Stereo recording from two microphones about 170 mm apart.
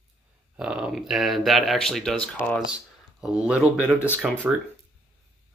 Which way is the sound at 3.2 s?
5° right (ahead or behind).